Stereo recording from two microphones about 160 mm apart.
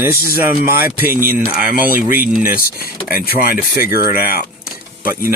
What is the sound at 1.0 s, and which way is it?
Speech, 15° right (ahead or behind).